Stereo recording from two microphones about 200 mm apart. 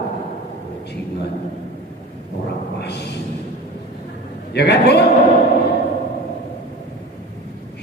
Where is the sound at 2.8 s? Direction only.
55° left (ahead or behind).